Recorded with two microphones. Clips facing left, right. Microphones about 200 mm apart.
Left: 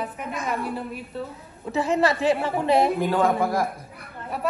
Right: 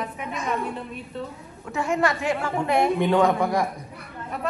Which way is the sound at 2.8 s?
Centre (ahead or behind).